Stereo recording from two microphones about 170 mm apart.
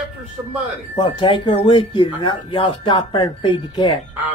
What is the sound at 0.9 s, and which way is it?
Speech, 30° left (ahead or behind).